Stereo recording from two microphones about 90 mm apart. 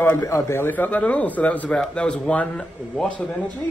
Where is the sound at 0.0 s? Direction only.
25° left (ahead or behind).